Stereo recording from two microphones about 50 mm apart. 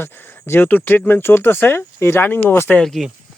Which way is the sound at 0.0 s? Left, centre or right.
Left.